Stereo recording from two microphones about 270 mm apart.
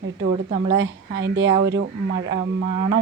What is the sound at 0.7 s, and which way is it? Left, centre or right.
Speech, right.